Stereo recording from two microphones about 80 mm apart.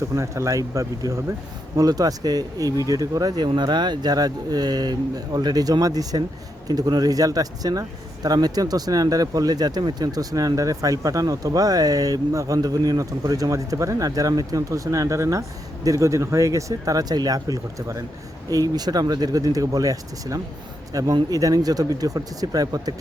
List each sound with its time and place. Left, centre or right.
0.2 s speech: right